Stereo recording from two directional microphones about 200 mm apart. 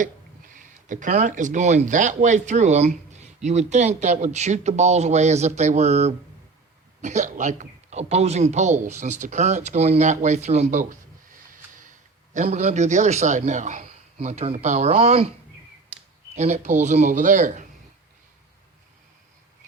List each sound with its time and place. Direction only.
0.0 s speech: 40° right (ahead or behind)
12.3 s speech: 35° right (ahead or behind)
16.3 s speech: 35° right (ahead or behind)